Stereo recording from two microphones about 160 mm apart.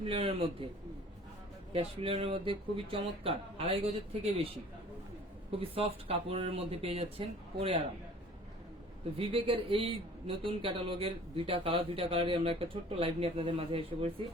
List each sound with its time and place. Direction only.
0.0 s a man's voice: 35° right (ahead or behind)
1.7 s a man's voice: 35° right (ahead or behind)
5.5 s a man's voice: 35° right (ahead or behind)
9.1 s a man's voice: 35° right (ahead or behind)